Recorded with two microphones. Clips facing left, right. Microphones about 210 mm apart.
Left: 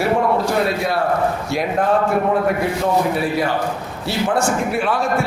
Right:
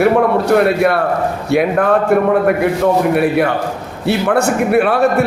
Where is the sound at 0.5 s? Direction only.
60° right (ahead or behind).